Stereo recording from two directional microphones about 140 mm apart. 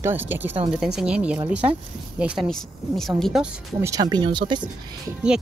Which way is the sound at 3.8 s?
25° right (ahead or behind).